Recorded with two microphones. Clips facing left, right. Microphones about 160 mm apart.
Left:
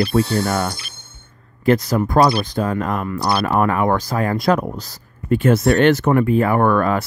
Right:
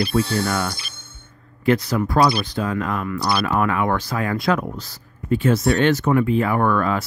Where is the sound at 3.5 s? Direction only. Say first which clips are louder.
Left 5 dB; 40° left (ahead or behind).